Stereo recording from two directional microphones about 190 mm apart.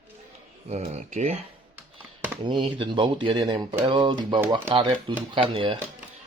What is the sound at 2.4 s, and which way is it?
Speech, 25° right (ahead or behind).